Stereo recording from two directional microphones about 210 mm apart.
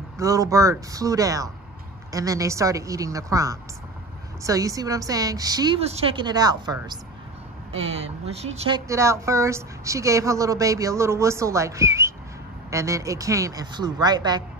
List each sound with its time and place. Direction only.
0.2 s a woman's voice: 15° right (ahead or behind)